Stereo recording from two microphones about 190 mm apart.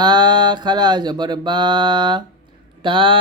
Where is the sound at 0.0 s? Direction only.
20° right (ahead or behind).